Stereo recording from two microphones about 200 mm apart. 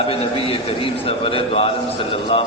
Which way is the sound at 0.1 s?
25° left (ahead or behind).